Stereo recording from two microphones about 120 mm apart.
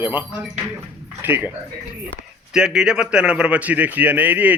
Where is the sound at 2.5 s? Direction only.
5° right (ahead or behind).